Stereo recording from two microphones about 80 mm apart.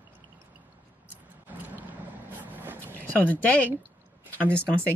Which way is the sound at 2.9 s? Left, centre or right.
Left.